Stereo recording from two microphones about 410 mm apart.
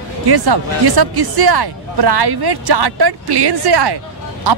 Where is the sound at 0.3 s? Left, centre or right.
Right.